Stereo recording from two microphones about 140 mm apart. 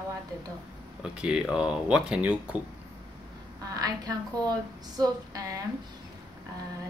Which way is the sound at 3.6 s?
25° right (ahead or behind).